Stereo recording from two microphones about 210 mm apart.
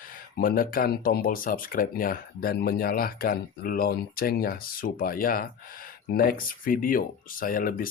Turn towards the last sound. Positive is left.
turn(degrees=40)  # may be behind; listen again after turning